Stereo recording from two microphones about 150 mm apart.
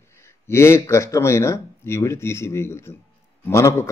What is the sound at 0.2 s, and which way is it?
Speech, 15° left (ahead or behind).